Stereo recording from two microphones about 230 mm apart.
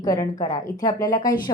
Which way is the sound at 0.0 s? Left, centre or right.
Centre.